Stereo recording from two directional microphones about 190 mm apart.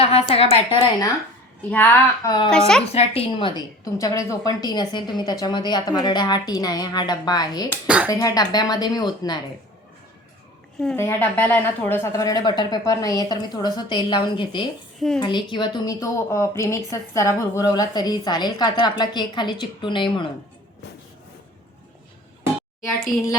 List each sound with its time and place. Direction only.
0.0 s a woman's voice: 30° left (ahead or behind)
1.7 s speech: 10° left (ahead or behind)
2.9 s speech: 30° left (ahead or behind)
7.9 s speech: 5° right (ahead or behind)
8.1 s speech: 20° left (ahead or behind)
10.8 s speech: 10° left (ahead or behind); by 20.2 s 25° left (ahead or behind)
20.8 s train: 65° left (ahead or behind)